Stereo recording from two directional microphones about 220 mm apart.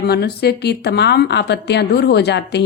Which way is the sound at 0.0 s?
45° left (ahead or behind).